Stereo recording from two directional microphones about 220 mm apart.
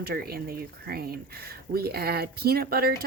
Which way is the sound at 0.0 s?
45° right (ahead or behind).